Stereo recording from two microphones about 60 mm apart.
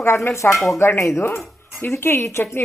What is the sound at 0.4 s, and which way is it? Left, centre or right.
A woman's voice, left.